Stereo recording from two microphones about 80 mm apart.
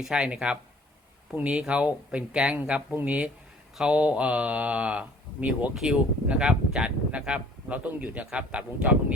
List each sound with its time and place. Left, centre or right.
0.0 s speech: centre